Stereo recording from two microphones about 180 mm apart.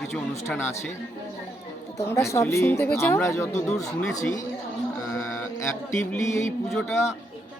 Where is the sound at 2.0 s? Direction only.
15° left (ahead or behind).